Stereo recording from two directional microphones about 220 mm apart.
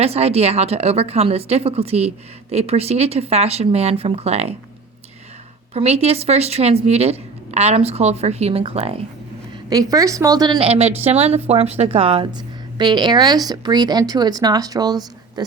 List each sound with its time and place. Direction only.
0.0 s a woman's voice: 30° right (ahead or behind)
5.7 s a woman's voice: 30° right (ahead or behind)